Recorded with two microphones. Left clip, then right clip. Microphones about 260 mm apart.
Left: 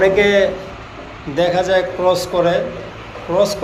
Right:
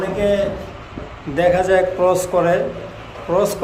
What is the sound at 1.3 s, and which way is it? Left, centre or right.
A man's voice, centre.